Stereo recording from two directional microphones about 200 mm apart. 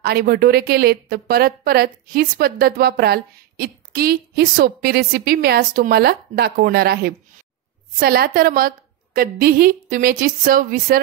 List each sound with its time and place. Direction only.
0.0 s a woman's voice: 50° right (ahead or behind)